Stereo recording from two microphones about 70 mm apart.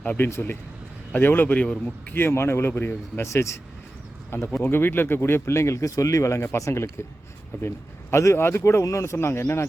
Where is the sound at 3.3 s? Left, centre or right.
Left.